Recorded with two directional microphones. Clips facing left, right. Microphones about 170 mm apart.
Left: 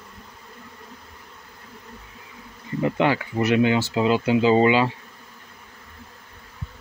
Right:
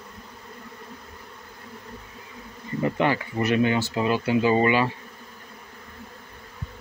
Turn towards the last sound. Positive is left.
turn(degrees=20)  # may be behind; listen again after turning